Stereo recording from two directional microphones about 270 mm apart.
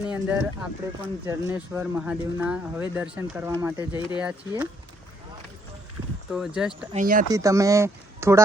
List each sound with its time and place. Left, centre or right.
0.0 s speech: centre
6.3 s speech: centre
6.9 s speech: right
7.3 s speech: centre